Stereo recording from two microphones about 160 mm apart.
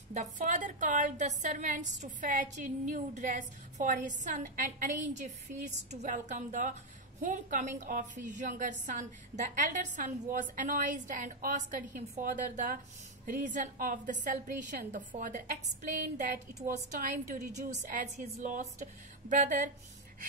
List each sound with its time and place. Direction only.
0.1 s a woman's voice: 50° right (ahead or behind)
17.8 s a woman's voice: 50° right (ahead or behind)